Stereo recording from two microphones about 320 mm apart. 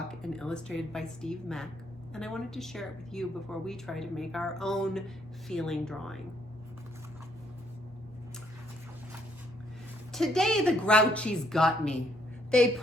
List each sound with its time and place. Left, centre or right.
0.1 s speech: centre
10.1 s speech: centre